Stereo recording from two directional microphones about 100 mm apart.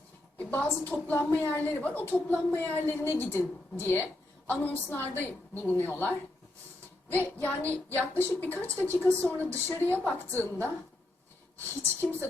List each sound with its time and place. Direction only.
0.3 s a woman's voice: 15° left (ahead or behind)